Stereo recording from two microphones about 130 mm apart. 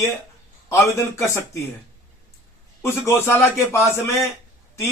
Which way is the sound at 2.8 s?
20° left (ahead or behind).